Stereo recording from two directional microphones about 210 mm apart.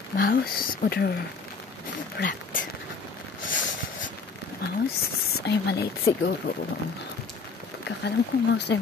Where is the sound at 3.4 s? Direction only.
60° left (ahead or behind).